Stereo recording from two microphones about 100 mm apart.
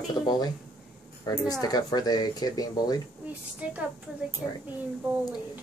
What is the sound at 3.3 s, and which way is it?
Speech, 15° right (ahead or behind).